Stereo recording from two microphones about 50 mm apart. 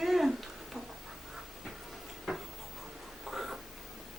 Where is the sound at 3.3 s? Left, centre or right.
Centre.